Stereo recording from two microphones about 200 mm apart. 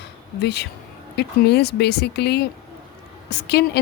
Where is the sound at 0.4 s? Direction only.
55° left (ahead or behind).